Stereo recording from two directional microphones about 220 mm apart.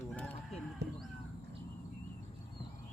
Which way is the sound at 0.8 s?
50° right (ahead or behind).